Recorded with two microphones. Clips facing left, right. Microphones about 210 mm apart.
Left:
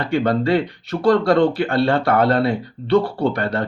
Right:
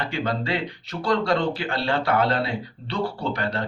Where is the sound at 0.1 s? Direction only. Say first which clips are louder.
Left 13 dB; 55° left (ahead or behind).